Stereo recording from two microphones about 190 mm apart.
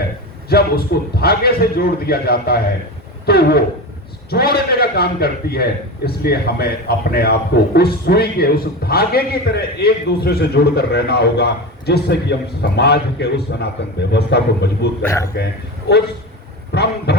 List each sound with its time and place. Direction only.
0.4 s a man's voice: 55° left (ahead or behind)
15.0 s a man's voice: 15° left (ahead or behind)
15.9 s a man's voice: 60° left (ahead or behind)